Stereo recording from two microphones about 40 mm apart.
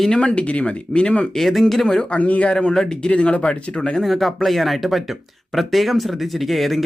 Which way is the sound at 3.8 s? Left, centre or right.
Centre.